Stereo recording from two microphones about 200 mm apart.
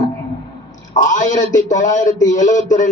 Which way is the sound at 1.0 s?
40° left (ahead or behind).